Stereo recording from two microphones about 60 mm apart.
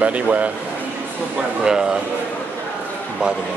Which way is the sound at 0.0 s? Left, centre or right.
Right.